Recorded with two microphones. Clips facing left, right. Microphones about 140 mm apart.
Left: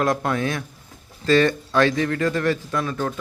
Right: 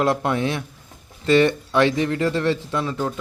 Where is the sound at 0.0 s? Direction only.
20° right (ahead or behind).